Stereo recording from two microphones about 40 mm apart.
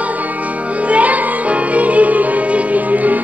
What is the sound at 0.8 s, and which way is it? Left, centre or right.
Music, right.